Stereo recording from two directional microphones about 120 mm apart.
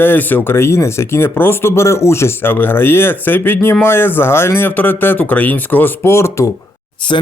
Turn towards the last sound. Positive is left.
turn(degrees=45)  # may be behind; listen again after turning